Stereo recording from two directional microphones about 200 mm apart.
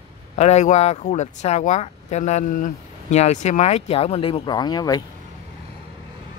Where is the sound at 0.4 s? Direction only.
35° left (ahead or behind).